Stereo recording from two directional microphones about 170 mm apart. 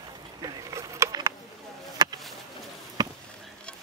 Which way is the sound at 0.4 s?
20° right (ahead or behind).